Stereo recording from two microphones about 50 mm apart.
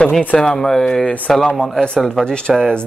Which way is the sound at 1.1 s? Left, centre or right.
Left.